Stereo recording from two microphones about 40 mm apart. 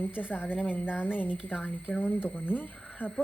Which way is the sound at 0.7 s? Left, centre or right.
Right.